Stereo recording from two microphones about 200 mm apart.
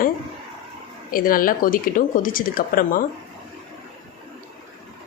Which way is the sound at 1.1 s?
45° left (ahead or behind).